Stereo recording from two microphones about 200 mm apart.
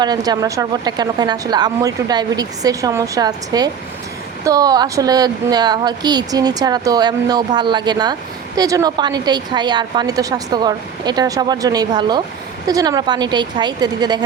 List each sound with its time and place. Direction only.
0.0 s a woman's voice: 20° right (ahead or behind)